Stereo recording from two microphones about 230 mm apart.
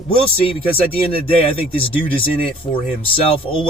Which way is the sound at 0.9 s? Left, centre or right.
Left.